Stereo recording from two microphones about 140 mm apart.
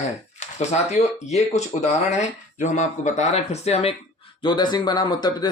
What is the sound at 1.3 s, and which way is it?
Speech, 50° left (ahead or behind).